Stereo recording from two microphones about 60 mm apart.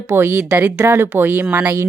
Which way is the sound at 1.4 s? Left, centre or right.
Right.